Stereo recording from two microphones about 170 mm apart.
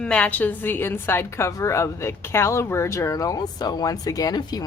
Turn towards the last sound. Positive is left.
turn(degrees=20)  # may be behind; listen again after turning